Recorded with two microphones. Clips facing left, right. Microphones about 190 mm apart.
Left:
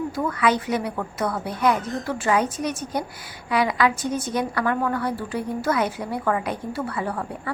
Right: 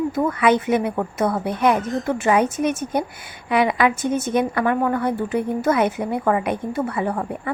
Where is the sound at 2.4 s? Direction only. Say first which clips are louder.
Right 5 dB; 55° right (ahead or behind).